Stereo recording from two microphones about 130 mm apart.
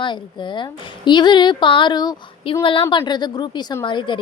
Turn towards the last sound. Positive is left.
turn(degrees=40)  # may be behind; listen again after turning